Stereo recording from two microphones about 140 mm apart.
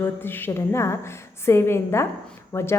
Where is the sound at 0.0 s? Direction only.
15° left (ahead or behind).